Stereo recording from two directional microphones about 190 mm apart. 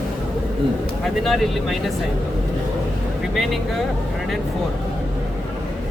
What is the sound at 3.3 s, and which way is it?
Speech, centre (ahead or behind).